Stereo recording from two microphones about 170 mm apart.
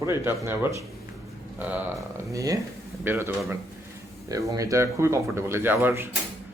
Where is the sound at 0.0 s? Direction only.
15° right (ahead or behind).